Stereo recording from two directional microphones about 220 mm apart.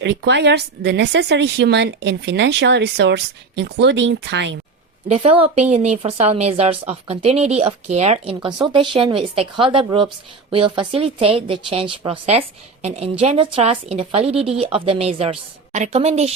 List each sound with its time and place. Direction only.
0.0 s speech: 50° right (ahead or behind)
5.0 s speech: 30° right (ahead or behind)